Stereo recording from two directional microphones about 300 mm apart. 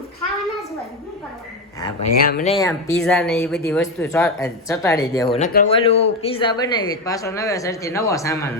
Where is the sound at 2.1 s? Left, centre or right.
Left.